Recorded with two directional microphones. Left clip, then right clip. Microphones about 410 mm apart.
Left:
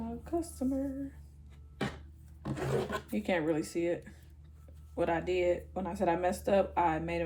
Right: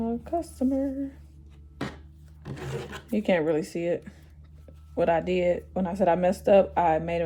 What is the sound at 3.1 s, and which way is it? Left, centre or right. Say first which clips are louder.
Speech: right 10 dB; right.